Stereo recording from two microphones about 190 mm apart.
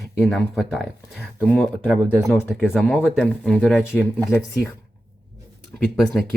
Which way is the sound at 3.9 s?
10° left (ahead or behind).